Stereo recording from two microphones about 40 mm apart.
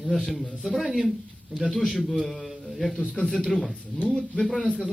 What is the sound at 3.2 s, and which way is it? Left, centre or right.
Speech, left.